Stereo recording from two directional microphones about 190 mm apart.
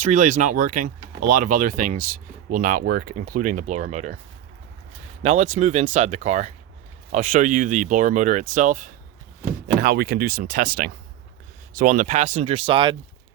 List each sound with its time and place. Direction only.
0.0 s speech: 40° right (ahead or behind)
5.2 s speech: 40° right (ahead or behind)
9.8 s speech: 55° right (ahead or behind); by 13.0 s 25° right (ahead or behind)